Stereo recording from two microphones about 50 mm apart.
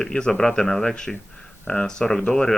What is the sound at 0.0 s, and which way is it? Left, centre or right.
Speech, centre.